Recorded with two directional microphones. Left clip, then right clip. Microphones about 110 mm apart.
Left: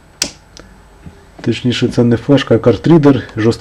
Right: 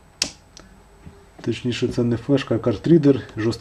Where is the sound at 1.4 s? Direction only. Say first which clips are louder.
Left 8 dB; 45° left (ahead or behind).